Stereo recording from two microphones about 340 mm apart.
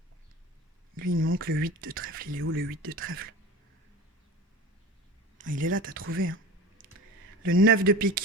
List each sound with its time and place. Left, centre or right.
0.9 s speech: right
5.4 s speech: right
6.0 s a sound: right
7.4 s speech: right